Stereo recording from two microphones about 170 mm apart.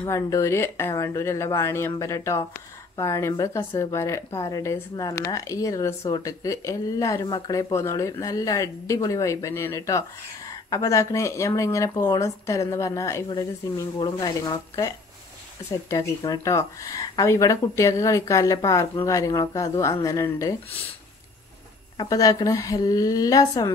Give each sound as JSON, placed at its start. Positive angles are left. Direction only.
{"t": 0.1, "sound": "a woman's voice", "side_deg": 15}
{"t": 21.9, "sound": "speech", "side_deg": 20}